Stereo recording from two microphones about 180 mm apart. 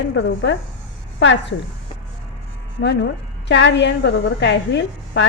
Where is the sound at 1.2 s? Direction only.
90° left.